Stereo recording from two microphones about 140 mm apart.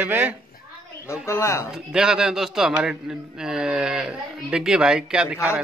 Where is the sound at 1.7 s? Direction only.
5° right (ahead or behind).